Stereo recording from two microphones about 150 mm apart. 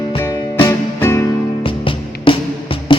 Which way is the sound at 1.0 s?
15° left (ahead or behind).